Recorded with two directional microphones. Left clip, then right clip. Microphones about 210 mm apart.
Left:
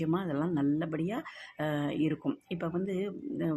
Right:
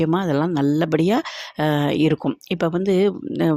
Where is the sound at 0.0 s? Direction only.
40° right (ahead or behind).